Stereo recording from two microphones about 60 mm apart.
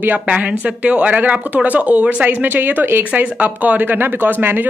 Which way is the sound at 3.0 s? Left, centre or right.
Right.